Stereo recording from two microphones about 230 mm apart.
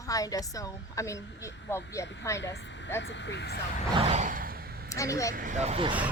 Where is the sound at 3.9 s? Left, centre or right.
Right.